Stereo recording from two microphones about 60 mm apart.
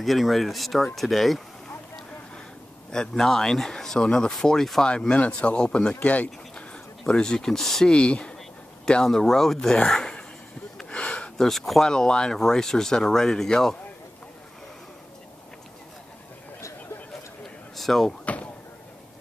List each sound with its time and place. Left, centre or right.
0.0 s speech: centre
2.9 s speech: centre
7.9 s speech: centre
10.8 s a sound: centre
11.4 s speech: centre
17.7 s door: centre
18.2 s a sound: left